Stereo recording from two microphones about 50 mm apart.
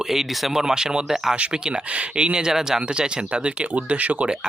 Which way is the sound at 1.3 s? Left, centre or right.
Right.